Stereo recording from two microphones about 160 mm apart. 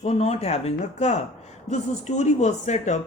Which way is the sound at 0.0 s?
40° left (ahead or behind).